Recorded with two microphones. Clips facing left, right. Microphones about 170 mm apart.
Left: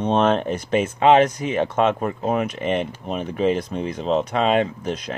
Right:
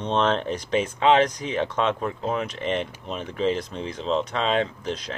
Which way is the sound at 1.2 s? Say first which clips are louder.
Left 4 dB; 10° left (ahead or behind).